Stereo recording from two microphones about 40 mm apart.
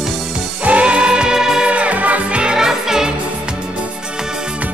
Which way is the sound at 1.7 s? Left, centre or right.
Right.